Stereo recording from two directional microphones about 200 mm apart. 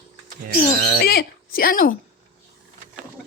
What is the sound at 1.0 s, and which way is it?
Speech, 50° left (ahead or behind).